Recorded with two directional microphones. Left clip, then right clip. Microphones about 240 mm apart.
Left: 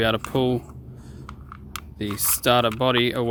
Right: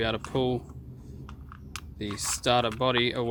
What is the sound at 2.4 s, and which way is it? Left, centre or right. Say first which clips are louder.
Speech: left 5 dB; left.